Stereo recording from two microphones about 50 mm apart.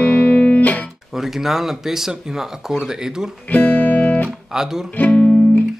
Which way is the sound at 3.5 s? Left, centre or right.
Left.